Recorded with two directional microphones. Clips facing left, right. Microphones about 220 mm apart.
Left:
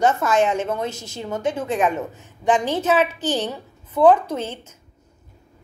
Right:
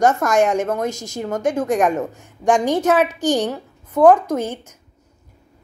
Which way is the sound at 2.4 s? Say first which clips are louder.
Right 3 dB; 15° right (ahead or behind).